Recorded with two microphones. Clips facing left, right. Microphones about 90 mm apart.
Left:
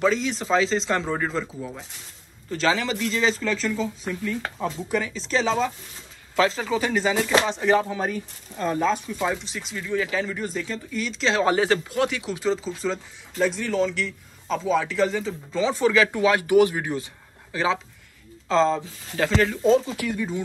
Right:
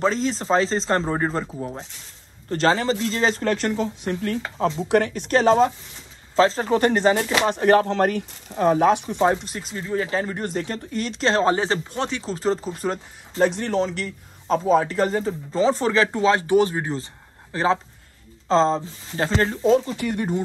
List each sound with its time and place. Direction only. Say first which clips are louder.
0.0 s a man's voice: right 1 dB; 35° right (ahead or behind)
2.5 s speech: right 4 dB; 40° right (ahead or behind); by 4.4 s 65° right (ahead or behind)
4.6 s speech: right 9 dB; 85° right; by 5.7 s 50° right (ahead or behind)
6.3 s a man's voice: right 4 dB; 35° right (ahead or behind)
6.7 s speech: right 5 dB; 55° right (ahead or behind); by 9.2 s 70° right (ahead or behind)
9.2 s a man's voice: right 6 dB; 45° right (ahead or behind)
20.1 s speech: right 6 dB; 55° right (ahead or behind)